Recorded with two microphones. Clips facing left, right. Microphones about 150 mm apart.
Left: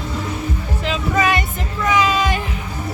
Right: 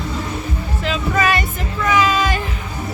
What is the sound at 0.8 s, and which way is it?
Music, 20° left (ahead or behind).